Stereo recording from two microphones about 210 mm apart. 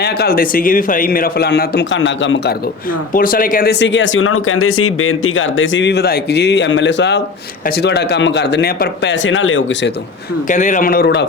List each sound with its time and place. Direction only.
0.0 s a man's voice: 50° left (ahead or behind)
2.0 s speech: 65° left (ahead or behind)
3.1 s speech: 40° left (ahead or behind); by 9.9 s 65° left (ahead or behind)
10.5 s a man's voice: 35° left (ahead or behind); by 11.3 s 50° left (ahead or behind)